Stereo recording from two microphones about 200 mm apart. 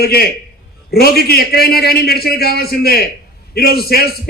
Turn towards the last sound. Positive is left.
turn(degrees=50)  # may be behind; listen again after turning